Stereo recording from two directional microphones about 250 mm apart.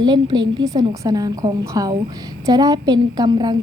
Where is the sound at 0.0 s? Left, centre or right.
Centre.